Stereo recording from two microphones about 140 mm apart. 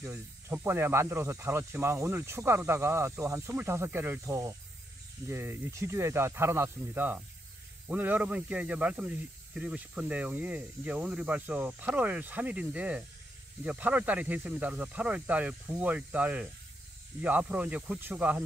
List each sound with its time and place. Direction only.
0.0 s speech: 15° right (ahead or behind)